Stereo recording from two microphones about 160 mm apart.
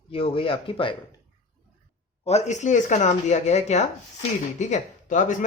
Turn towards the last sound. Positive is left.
turn(degrees=50)  # may be behind; listen again after turning